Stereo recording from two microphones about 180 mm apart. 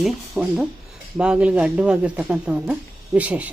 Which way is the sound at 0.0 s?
5° right (ahead or behind).